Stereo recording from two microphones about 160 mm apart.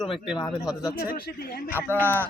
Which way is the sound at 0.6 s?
5° right (ahead or behind).